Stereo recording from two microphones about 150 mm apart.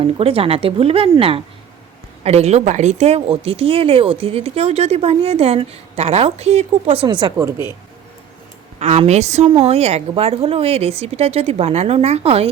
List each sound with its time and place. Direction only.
0.0 s a woman's voice: 40° right (ahead or behind)
7.3 s speech: 15° right (ahead or behind)
8.8 s a woman's voice: 45° right (ahead or behind)